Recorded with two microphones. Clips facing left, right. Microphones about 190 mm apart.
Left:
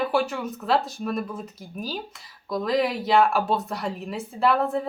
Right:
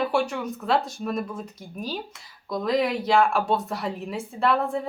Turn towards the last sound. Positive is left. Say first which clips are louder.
# left 1 dB
turn(degrees=0)  # may be behind; listen again after turning